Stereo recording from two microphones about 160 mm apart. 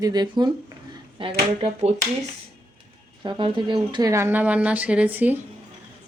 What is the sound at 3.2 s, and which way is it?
Speech, 30° right (ahead or behind).